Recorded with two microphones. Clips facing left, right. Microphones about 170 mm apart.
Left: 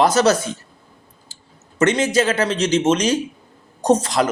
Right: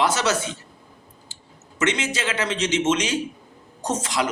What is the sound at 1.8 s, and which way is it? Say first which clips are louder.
Speech: left 8 dB; 40° left (ahead or behind).